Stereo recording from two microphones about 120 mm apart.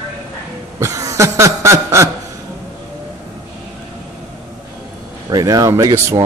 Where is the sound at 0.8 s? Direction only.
25° right (ahead or behind).